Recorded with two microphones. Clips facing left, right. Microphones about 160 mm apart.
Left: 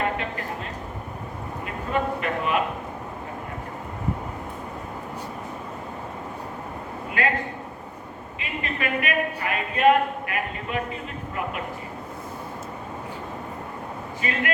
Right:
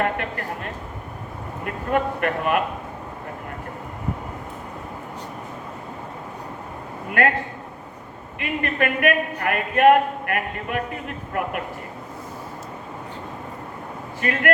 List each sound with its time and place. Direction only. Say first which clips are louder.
0.0 s a sound: right 2 dB; 55° right (ahead or behind)
1.6 s a man's voice: right 3 dB; 55° right (ahead or behind)
7.2 s a woman's voice: right 5 dB; 55° right (ahead or behind)
8.4 s a woman's voice: right 7 dB; 55° right (ahead or behind)
14.2 s a woman's voice: right 6 dB; 55° right (ahead or behind)